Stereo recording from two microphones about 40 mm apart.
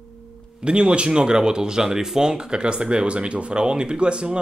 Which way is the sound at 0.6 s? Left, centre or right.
Right.